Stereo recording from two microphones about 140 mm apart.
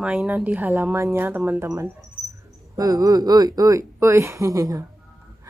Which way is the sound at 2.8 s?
25° right (ahead or behind).